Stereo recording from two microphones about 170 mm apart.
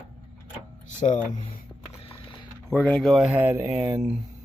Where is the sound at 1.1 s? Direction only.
40° left (ahead or behind).